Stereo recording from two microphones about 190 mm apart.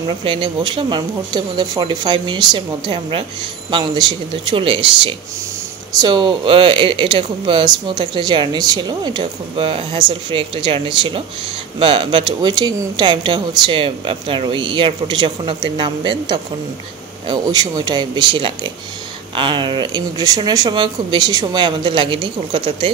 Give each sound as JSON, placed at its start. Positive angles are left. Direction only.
{"t": 0.2, "sound": "speech", "side_deg": -25}